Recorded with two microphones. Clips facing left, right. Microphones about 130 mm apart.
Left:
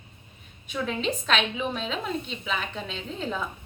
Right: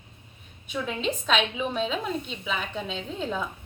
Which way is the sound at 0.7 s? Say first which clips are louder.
Left 1 dB; 5° right (ahead or behind).